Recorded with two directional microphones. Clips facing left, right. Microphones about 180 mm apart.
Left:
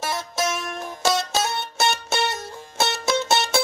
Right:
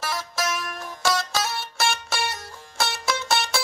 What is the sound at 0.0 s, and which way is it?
Music, 25° left (ahead or behind).